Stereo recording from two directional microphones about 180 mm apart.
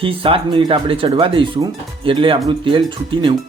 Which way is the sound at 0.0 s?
30° right (ahead or behind).